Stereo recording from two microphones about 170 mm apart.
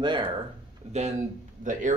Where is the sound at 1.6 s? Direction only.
50° right (ahead or behind).